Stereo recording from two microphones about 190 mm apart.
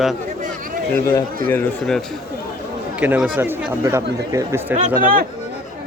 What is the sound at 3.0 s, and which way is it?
Speech, 10° right (ahead or behind).